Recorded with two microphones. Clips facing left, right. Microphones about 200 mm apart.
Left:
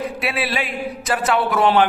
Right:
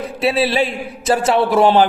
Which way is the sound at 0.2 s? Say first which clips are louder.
Right 11 dB; 30° right (ahead or behind).